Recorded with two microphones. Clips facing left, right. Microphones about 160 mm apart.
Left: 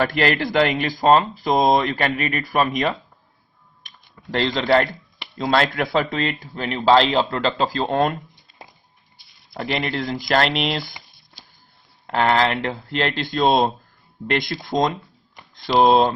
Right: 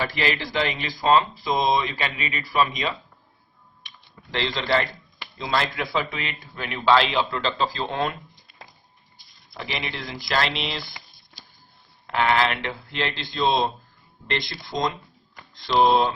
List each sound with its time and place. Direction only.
0.0 s speech: 55° left (ahead or behind)
3.8 s typing: 45° left (ahead or behind)
5.4 s speech: 60° left (ahead or behind)
6.0 s speech: 45° left (ahead or behind)
6.7 s a man's voice: 35° left (ahead or behind)
9.6 s speech: 50° left (ahead or behind)
12.0 s speech: 40° left (ahead or behind)